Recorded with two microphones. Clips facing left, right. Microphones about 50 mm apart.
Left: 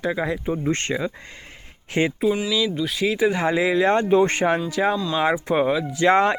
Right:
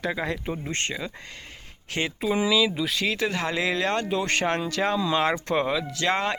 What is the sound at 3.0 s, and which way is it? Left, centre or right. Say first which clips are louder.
Speech: left 8 dB; centre.